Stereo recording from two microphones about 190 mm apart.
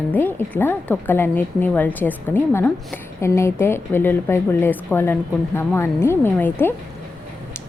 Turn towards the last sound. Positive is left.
turn(degrees=10)  # may be behind; listen again after turning